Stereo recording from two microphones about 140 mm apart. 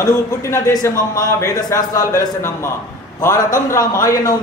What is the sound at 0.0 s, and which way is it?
A man's voice, 20° left (ahead or behind).